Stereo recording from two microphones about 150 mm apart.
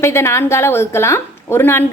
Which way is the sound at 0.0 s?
20° left (ahead or behind).